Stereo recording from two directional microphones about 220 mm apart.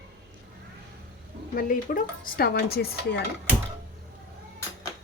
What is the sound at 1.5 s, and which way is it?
A woman's voice, 40° left (ahead or behind).